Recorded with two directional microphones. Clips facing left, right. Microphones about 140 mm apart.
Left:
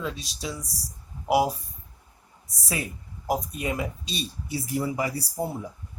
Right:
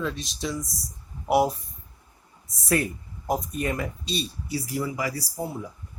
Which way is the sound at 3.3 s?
10° left (ahead or behind).